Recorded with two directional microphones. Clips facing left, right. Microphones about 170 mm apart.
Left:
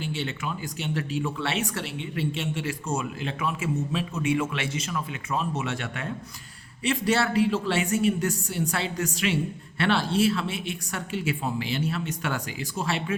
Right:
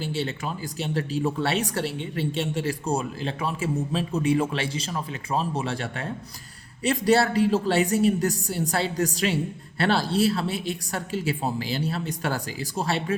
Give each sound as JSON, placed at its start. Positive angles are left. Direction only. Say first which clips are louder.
{"t": 0.0, "sound": "speech", "louder": "right 2 dB", "side_deg": -35}